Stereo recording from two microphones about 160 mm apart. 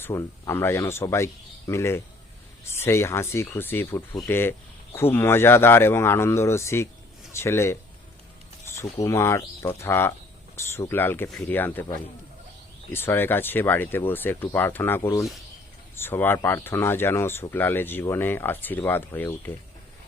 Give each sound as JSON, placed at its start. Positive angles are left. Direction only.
{"t": 0.0, "sound": "speech", "side_deg": 15}
{"t": 8.8, "sound": "speech", "side_deg": 20}